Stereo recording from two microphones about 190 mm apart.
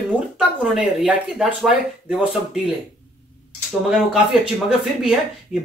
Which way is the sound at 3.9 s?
5° right (ahead or behind).